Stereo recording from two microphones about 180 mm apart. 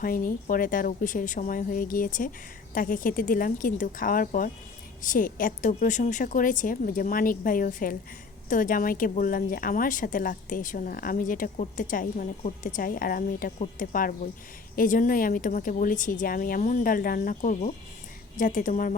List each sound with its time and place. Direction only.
0.0 s speech: 50° left (ahead or behind)